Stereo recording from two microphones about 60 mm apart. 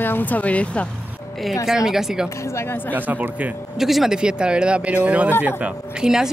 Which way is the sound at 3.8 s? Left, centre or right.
Centre.